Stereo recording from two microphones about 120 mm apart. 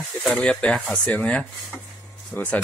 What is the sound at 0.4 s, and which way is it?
Speech, 10° left (ahead or behind).